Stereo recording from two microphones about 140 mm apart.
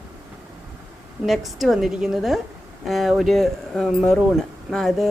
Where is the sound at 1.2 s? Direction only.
Centre (ahead or behind).